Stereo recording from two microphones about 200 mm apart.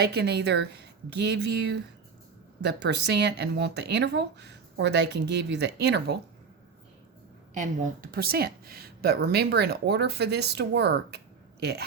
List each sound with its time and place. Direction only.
0.0 s speech: 55° right (ahead or behind)
7.5 s speech: 40° right (ahead or behind)